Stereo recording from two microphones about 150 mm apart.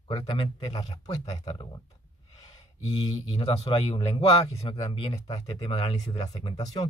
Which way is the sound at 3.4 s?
40° left (ahead or behind).